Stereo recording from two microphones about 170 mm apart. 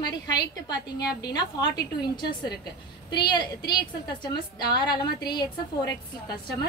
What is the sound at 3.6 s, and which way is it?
A woman's voice, 25° left (ahead or behind).